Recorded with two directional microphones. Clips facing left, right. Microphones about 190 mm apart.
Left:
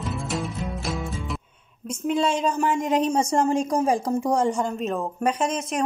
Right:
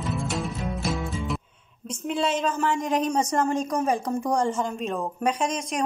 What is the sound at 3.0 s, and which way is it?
A woman's voice, 30° left (ahead or behind).